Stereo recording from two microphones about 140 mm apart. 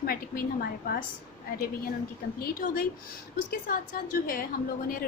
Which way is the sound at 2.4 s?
90° left.